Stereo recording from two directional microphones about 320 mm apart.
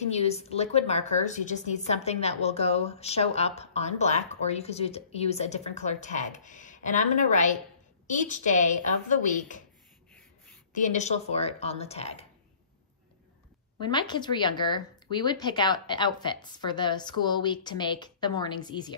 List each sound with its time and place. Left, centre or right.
0.0 s a woman's voice: centre
10.7 s a woman's voice: left
13.7 s speech: centre